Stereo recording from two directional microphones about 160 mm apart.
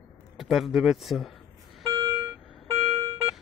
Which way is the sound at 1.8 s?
20° right (ahead or behind).